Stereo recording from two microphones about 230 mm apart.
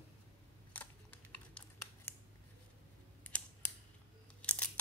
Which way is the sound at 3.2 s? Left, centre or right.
Centre.